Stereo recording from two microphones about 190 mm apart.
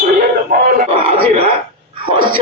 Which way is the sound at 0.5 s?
45° right (ahead or behind).